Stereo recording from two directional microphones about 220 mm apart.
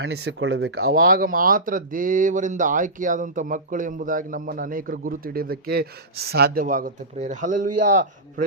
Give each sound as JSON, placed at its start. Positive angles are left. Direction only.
{"t": 0.0, "sound": "speech", "side_deg": -55}
{"t": 0.9, "sound": "speech", "side_deg": -40}